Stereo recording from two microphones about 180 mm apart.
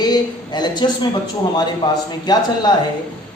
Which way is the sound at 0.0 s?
25° left (ahead or behind).